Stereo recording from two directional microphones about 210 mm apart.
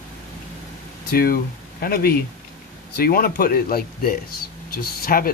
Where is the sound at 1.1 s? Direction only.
45° left (ahead or behind).